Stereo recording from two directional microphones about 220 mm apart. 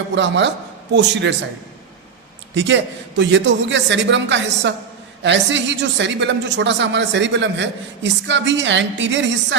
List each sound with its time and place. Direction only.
0.1 s speech: 55° right (ahead or behind)
2.6 s a woman's voice: 55° right (ahead or behind)